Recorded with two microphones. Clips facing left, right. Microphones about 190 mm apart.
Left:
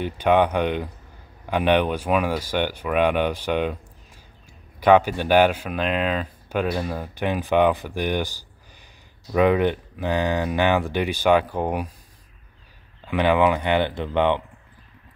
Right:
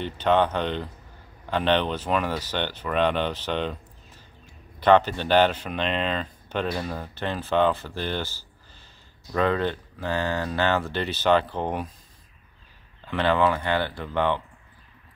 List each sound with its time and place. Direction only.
0.0 s speech: 10° left (ahead or behind)
4.7 s speech: 10° left (ahead or behind)
13.0 s speech: 15° left (ahead or behind)